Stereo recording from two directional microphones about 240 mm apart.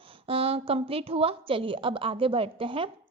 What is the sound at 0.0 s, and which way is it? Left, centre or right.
A woman's voice, right.